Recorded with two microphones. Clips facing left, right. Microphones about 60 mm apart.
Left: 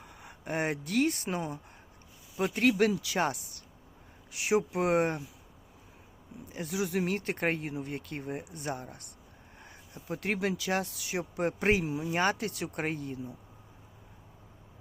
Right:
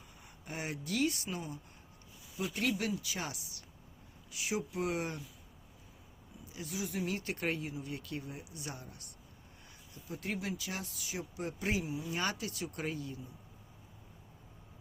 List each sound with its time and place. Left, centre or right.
0.0 s speech: left
2.6 s speech: left
3.2 s speech: left
4.3 s speech: left
6.4 s speech: left
7.0 s speech: left
9.9 s speech: left
12.1 s speech: left